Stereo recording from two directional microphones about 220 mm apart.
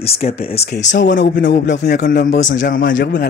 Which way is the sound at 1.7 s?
45° left (ahead or behind).